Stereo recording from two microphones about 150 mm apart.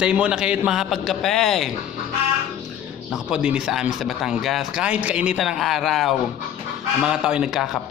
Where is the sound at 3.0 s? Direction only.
5° right (ahead or behind).